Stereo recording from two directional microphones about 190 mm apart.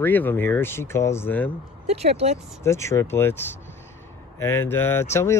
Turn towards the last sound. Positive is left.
turn(degrees=10)  # may be behind; listen again after turning